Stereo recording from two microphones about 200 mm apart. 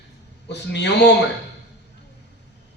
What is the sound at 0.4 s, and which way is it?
Speech, 60° left (ahead or behind).